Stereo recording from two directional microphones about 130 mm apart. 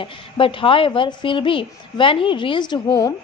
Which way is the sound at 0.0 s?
40° left (ahead or behind).